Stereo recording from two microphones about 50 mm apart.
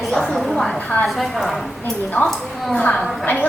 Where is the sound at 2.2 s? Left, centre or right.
Left.